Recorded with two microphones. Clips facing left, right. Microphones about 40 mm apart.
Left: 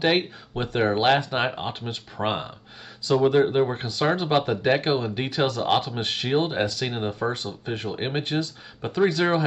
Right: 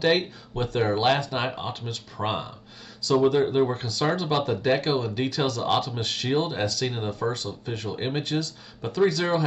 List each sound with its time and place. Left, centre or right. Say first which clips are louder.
0.0 s speech: even; left